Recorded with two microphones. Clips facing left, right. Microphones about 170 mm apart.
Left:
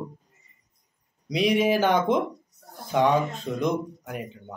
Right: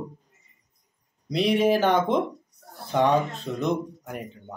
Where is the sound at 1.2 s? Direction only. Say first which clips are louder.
Right 1 dB; centre (ahead or behind).